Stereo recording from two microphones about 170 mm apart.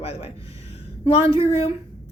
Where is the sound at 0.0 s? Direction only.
35° left (ahead or behind).